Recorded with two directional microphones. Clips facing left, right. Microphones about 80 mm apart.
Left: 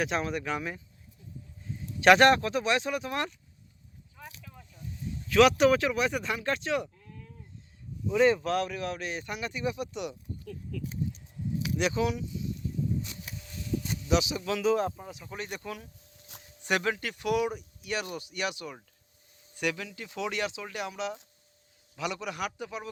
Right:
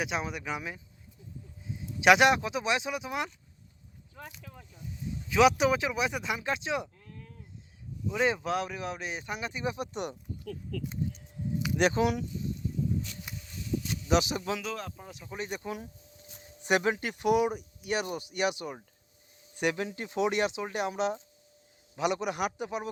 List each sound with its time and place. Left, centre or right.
0.0 s speech: centre
2.0 s speech: centre
4.1 s a sound: right
5.3 s speech: centre
8.0 s speech: centre; by 10.2 s right
10.4 s speech: right
11.8 s speech: right
14.1 s speech: right
15.2 s speech: centre
15.6 s speech: right
20.1 s speech: right